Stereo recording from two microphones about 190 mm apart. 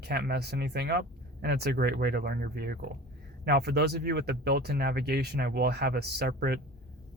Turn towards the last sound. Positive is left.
turn(degrees=-55)  # may be behind; listen again after turning